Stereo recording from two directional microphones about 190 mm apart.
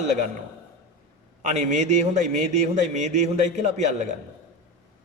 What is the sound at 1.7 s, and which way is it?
A man's voice, 40° right (ahead or behind).